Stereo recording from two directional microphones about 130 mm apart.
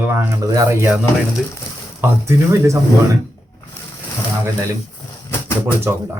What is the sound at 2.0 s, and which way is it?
Speech, 20° right (ahead or behind).